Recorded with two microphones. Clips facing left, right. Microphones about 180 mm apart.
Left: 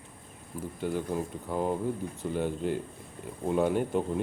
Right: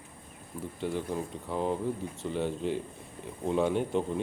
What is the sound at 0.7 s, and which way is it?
Speech, centre (ahead or behind).